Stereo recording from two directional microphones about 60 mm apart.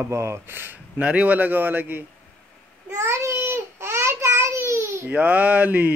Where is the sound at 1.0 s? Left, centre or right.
Right.